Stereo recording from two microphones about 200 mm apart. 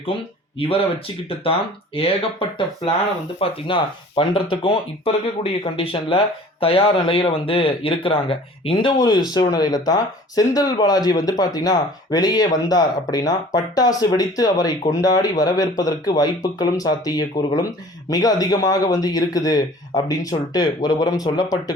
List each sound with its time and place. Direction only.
0.6 s speech: 25° left (ahead or behind)